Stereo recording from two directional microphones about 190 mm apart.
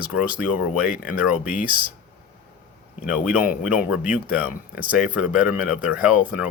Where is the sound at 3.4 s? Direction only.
45° left (ahead or behind).